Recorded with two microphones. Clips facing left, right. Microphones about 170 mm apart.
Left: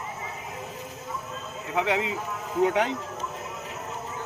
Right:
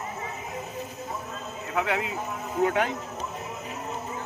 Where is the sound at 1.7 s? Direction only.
20° left (ahead or behind).